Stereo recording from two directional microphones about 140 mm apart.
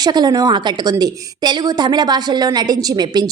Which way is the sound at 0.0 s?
30° right (ahead or behind).